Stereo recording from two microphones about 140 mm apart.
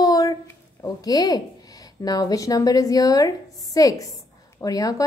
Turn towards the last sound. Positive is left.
turn(degrees=25)  # may be behind; listen again after turning